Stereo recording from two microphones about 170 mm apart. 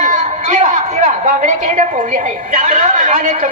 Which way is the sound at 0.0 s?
50° right (ahead or behind).